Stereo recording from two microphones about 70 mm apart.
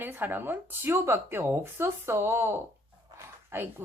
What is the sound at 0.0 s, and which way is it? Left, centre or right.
A woman's voice, right.